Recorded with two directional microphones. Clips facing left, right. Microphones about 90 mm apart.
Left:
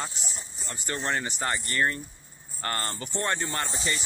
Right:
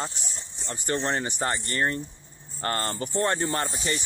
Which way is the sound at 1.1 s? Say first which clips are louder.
Right 2 dB; 30° right (ahead or behind).